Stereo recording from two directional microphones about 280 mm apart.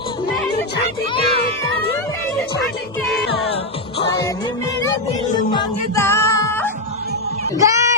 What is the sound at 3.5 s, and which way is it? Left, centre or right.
Music, centre.